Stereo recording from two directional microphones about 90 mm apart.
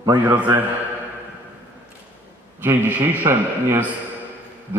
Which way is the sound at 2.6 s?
20° right (ahead or behind).